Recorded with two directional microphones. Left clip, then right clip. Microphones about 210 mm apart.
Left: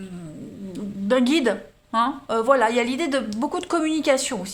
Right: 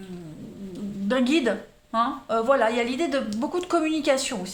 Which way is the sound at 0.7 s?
30° left (ahead or behind).